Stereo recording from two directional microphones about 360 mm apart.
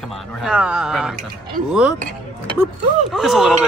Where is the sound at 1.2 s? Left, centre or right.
Right.